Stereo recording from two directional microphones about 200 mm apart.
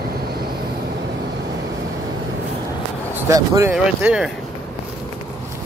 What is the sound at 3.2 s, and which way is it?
Speech, 15° right (ahead or behind).